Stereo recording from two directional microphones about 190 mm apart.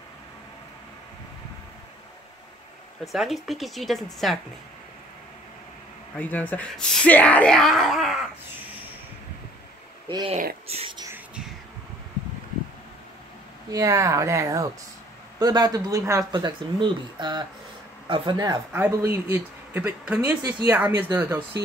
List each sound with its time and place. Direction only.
3.1 s speech: centre (ahead or behind)
6.1 s speech: 10° left (ahead or behind)
10.0 s speech: 25° right (ahead or behind)
13.7 s speech: 15° right (ahead or behind)